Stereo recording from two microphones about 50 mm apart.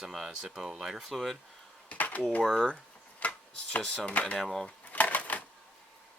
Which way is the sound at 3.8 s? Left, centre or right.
Centre.